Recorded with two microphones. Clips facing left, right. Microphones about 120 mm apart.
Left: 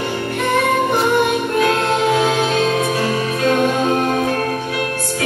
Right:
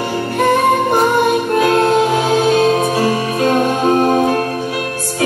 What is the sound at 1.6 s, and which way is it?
Music, 35° right (ahead or behind).